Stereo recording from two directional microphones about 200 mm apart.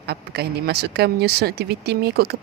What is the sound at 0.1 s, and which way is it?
Speech, 55° right (ahead or behind).